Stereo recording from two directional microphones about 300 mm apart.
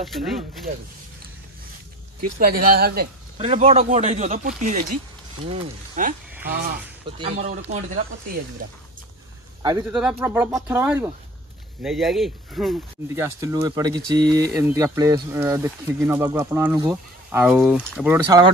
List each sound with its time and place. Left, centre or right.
0.0 s speech: centre
2.2 s speech: right
3.3 s speech: right
9.6 s speech: centre